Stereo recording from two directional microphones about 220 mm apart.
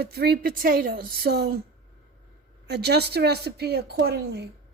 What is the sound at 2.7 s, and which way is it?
Speech, 50° right (ahead or behind).